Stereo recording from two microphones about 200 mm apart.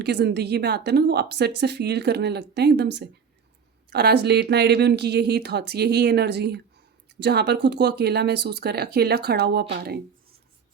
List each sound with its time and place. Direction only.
0.0 s a woman's voice: 55° right (ahead or behind)